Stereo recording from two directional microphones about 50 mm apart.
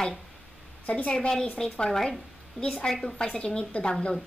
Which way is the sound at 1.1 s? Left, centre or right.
Centre.